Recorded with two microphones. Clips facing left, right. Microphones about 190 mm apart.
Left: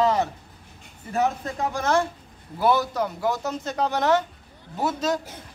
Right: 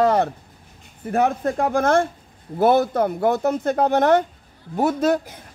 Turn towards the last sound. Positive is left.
turn(degrees=-55)  # may be behind; listen again after turning